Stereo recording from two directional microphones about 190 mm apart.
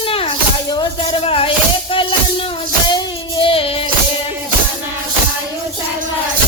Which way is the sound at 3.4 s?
30° left (ahead or behind).